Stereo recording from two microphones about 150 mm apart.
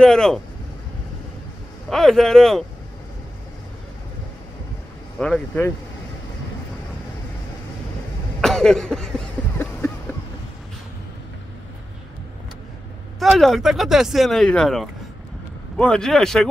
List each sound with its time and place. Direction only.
0.0 s speech: 5° left (ahead or behind)
1.9 s speech: centre (ahead or behind)
5.2 s speech: 10° left (ahead or behind)
8.4 s cough: 5° left (ahead or behind)
13.2 s speech: centre (ahead or behind)